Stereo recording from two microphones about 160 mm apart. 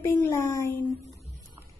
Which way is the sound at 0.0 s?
15° left (ahead or behind).